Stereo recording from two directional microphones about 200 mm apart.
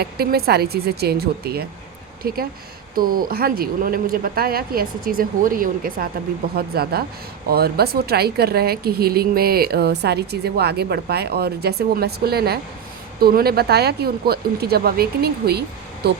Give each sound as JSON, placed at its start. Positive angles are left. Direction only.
{"t": 0.0, "sound": "speech", "side_deg": -50}